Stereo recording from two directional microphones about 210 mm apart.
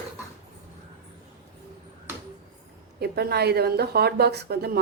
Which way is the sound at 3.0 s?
50° right (ahead or behind).